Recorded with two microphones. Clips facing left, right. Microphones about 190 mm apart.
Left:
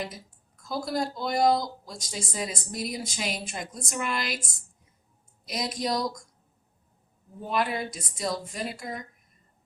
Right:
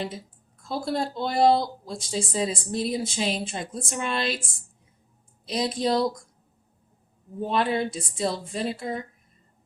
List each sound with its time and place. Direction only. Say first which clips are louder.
0.6 s speech: right 2 dB; 30° right (ahead or behind)
5.5 s speech: right 5 dB; 30° right (ahead or behind)
7.4 s speech: right 4 dB; 30° right (ahead or behind)